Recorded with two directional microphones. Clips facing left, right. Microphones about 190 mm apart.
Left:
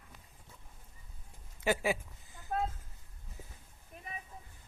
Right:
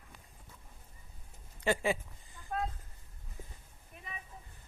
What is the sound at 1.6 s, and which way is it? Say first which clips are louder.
Speech: even; 5° left (ahead or behind).